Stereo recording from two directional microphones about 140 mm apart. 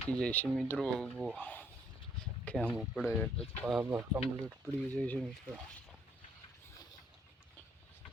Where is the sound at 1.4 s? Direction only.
15° left (ahead or behind).